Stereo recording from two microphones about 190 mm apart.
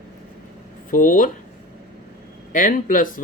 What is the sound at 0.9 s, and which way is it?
Speech, 45° left (ahead or behind).